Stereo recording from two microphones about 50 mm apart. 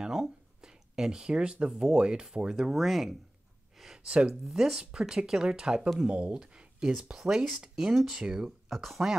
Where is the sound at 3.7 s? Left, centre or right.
Centre.